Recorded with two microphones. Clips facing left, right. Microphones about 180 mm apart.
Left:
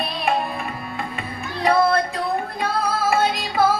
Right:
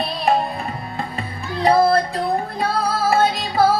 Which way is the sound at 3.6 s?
35° right (ahead or behind).